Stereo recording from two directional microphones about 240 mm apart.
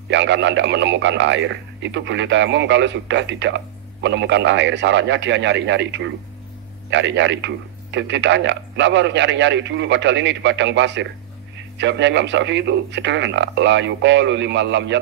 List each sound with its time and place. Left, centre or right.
0.1 s speech: right